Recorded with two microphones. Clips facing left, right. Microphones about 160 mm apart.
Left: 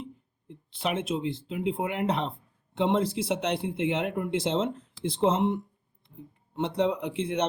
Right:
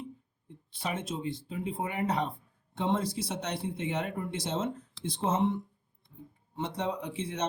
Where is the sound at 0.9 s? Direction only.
75° left (ahead or behind).